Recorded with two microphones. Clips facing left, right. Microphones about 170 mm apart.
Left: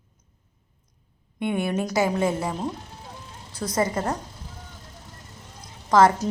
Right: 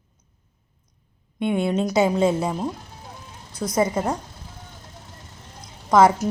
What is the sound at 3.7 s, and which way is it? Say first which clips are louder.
Speech: right 3 dB; 15° right (ahead or behind).